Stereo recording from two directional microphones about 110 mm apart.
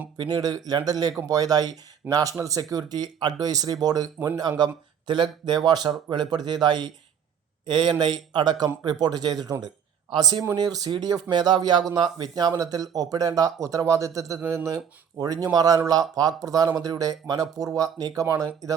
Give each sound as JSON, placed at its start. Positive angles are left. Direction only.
{"t": 0.2, "sound": "speech", "side_deg": -40}